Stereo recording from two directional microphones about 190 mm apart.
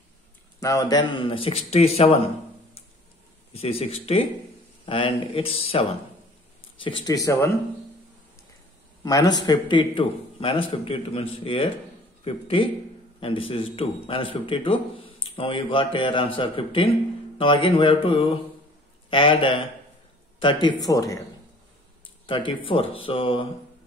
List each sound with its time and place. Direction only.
0.6 s speech: 20° left (ahead or behind)
3.5 s speech: 30° left (ahead or behind); by 7.5 s 15° left (ahead or behind)
9.0 s a man's voice: 20° left (ahead or behind)
22.2 s a sound: 25° left (ahead or behind)
22.7 s speech: 30° left (ahead or behind)